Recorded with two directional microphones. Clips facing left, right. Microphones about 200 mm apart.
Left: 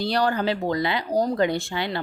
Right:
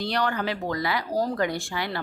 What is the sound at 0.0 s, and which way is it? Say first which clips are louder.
Speech: left 4 dB; 35° left (ahead or behind).